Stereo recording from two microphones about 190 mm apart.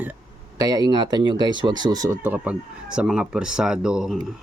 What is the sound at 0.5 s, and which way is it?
Speech, 20° right (ahead or behind).